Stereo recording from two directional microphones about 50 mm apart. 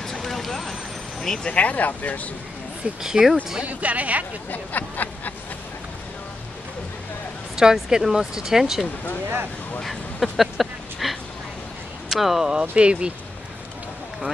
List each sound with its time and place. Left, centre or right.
0.0 s vehicle: centre
1.2 s speech: centre
1.5 s speech: left
3.0 s speech: centre
3.6 s speech: right
4.5 s speech: left
7.5 s speech: centre
9.8 s a sound: centre
12.1 s speech: centre